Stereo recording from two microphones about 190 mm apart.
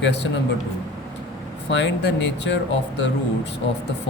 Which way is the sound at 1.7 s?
65° left (ahead or behind).